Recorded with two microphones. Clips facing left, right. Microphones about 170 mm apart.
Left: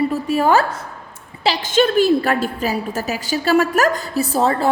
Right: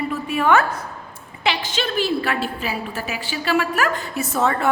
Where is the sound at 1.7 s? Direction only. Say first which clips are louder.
Left 13 dB; 45° left (ahead or behind).